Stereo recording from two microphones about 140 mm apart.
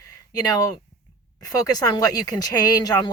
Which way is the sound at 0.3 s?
25° left (ahead or behind).